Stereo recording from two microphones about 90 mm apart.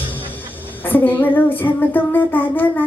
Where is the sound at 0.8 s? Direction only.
20° left (ahead or behind).